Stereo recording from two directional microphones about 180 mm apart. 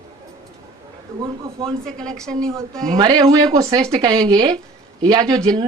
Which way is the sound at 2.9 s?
20° right (ahead or behind).